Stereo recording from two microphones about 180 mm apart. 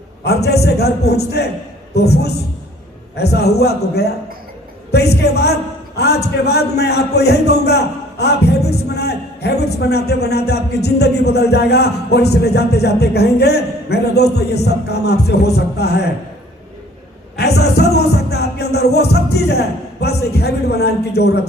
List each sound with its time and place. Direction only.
0.3 s a man's voice: 65° left (ahead or behind)
17.3 s music: 65° left (ahead or behind)